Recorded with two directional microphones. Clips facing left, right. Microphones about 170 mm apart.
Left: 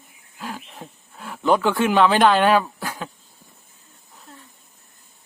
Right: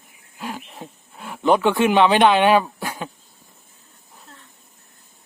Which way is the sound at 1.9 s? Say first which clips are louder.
Even; 20° right (ahead or behind).